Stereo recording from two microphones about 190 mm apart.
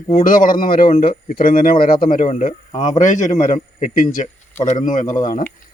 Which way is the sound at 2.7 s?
20° left (ahead or behind).